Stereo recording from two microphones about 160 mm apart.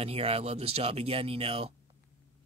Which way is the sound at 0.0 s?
40° right (ahead or behind).